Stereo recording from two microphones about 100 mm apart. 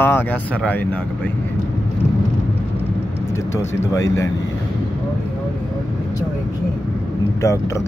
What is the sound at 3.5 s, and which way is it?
Speech, 30° left (ahead or behind).